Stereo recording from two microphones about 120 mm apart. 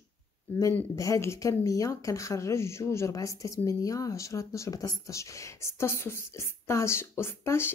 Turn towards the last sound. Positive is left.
turn(degrees=20)  # may be behind; listen again after turning